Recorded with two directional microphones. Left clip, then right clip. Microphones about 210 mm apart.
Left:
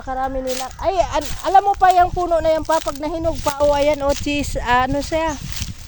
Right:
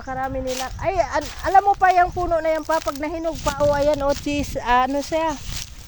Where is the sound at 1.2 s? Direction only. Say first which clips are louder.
Left 1 dB; 15° left (ahead or behind).